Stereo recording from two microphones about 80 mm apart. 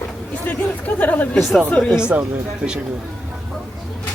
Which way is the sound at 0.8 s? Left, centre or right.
Left.